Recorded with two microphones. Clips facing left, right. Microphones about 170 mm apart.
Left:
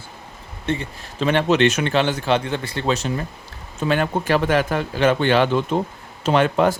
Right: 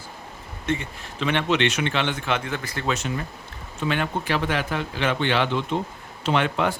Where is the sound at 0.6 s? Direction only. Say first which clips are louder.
Left 2 dB; 35° left (ahead or behind).